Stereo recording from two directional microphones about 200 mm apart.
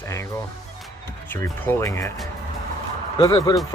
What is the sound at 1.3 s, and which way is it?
Speech, 10° left (ahead or behind).